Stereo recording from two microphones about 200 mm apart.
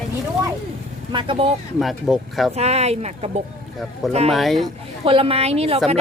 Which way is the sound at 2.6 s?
30° right (ahead or behind).